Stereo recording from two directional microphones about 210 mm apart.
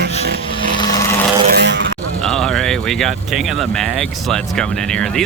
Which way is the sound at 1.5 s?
55° right (ahead or behind).